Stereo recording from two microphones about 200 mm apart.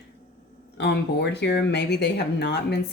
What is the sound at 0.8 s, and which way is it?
Speech, 55° left (ahead or behind).